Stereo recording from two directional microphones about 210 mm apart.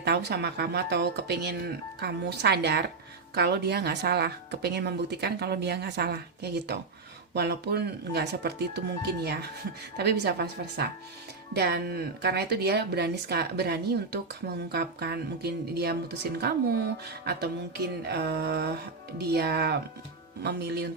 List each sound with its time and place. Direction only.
0.0 s a woman's voice: 50° right (ahead or behind)
17.2 s a woman's voice: 50° right (ahead or behind)